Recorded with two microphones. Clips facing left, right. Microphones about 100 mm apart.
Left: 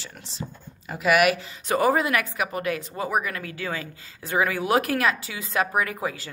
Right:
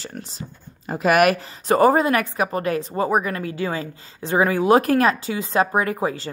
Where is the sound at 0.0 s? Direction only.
45° right (ahead or behind).